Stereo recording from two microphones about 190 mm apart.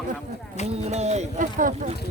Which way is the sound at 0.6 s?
35° right (ahead or behind).